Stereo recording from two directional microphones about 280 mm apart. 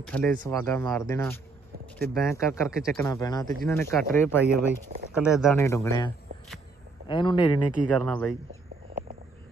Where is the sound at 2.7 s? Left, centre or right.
Centre.